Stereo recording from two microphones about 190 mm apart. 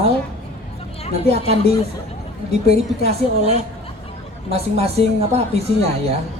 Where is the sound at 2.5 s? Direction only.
30° right (ahead or behind).